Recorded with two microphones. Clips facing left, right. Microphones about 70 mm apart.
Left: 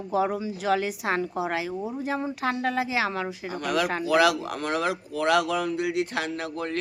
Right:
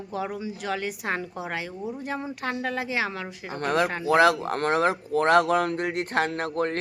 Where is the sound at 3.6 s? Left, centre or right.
Right.